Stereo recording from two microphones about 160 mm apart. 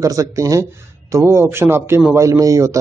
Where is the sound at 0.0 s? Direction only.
20° right (ahead or behind).